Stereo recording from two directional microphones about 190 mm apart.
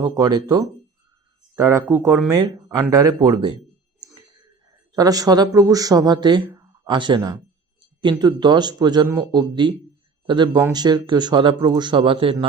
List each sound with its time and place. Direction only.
0.2 s speech: 20° right (ahead or behind)
4.9 s speech: 20° right (ahead or behind)